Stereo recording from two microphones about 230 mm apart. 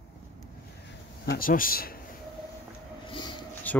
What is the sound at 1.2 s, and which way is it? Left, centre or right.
Speech, left.